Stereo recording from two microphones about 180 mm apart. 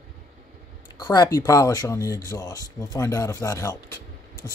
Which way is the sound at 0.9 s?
20° left (ahead or behind).